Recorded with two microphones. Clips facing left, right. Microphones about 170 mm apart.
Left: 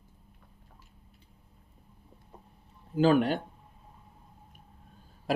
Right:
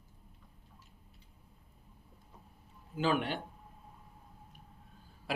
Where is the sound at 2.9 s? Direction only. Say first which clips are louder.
Left 8 dB; 40° left (ahead or behind).